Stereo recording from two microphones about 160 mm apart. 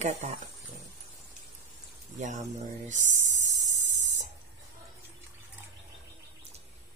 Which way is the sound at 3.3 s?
50° right (ahead or behind).